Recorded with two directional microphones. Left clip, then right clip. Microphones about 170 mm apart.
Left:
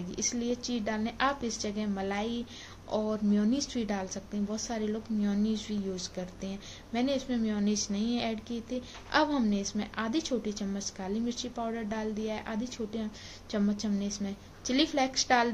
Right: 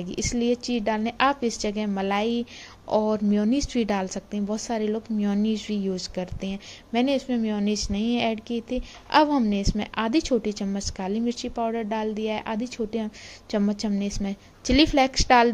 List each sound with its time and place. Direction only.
0.1 s speech: 50° right (ahead or behind)